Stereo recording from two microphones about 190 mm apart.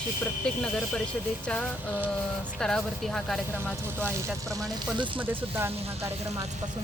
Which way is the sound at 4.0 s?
10° right (ahead or behind).